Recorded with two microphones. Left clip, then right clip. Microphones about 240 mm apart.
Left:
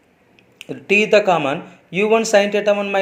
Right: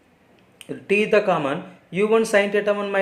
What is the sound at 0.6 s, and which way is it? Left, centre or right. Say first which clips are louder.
Speech: left 5 dB; centre.